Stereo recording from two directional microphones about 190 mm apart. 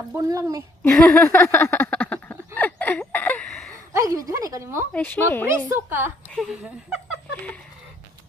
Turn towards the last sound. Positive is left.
turn(degrees=5)  # may be behind; listen again after turning